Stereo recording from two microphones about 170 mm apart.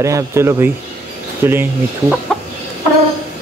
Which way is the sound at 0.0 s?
15° right (ahead or behind).